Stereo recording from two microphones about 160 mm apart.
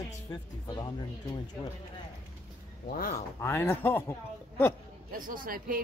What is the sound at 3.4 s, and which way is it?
Speech, 15° left (ahead or behind).